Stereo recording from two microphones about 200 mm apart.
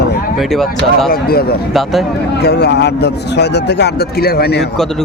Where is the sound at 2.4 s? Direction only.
55° left (ahead or behind).